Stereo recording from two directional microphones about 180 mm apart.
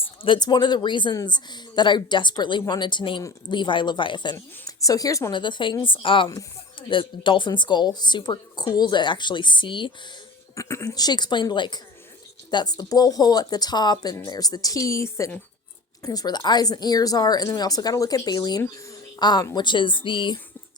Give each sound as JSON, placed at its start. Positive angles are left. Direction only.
{"t": 0.0, "sound": "speech", "side_deg": 30}
{"t": 10.5, "sound": "speech", "side_deg": 15}